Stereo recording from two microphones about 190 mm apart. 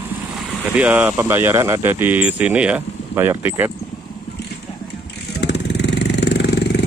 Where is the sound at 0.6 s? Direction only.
10° right (ahead or behind).